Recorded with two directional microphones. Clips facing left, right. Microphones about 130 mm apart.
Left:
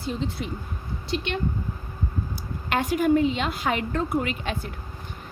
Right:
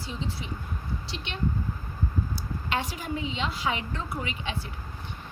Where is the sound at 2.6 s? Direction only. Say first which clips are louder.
Left 10 dB; 55° left (ahead or behind).